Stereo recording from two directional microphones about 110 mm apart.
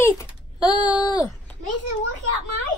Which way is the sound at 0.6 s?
40° left (ahead or behind).